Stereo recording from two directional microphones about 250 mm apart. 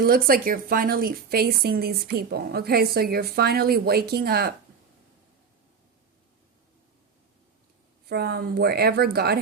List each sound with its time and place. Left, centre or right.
0.0 s a woman's voice: right
8.1 s a woman's voice: right